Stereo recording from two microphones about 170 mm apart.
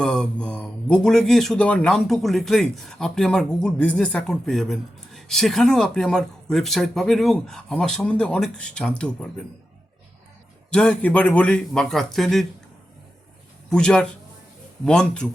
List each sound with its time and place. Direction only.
0.0 s speech: 5° left (ahead or behind)
10.7 s speech: 5° left (ahead or behind)
13.7 s speech: 5° left (ahead or behind)